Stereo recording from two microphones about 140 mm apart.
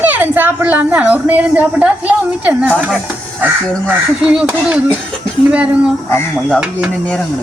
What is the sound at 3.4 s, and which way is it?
Speech, 10° right (ahead or behind).